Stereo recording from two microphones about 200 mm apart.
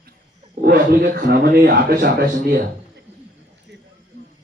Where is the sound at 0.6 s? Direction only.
55° right (ahead or behind).